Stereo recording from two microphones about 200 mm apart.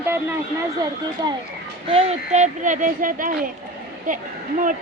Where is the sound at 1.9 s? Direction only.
30° right (ahead or behind).